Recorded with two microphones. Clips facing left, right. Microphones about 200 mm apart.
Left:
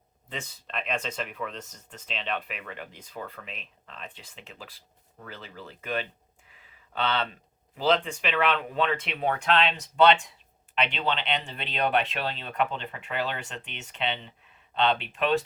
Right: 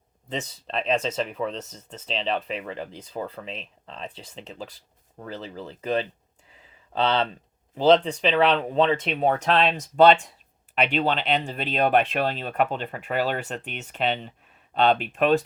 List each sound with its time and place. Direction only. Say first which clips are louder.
0.3 s speech: right 7 dB; 30° right (ahead or behind)